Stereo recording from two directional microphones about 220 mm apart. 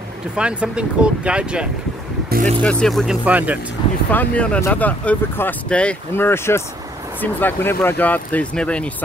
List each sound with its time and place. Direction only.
0.4 s speech: 5° right (ahead or behind)
2.2 s music: 40° right (ahead or behind)
2.6 s speech: 5° left (ahead or behind)
4.1 s speech: 5° left (ahead or behind)